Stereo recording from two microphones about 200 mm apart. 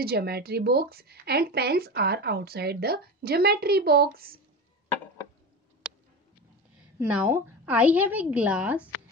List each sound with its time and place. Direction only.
0.0 s a woman's voice: 50° right (ahead or behind)
7.0 s a woman's voice: 10° right (ahead or behind)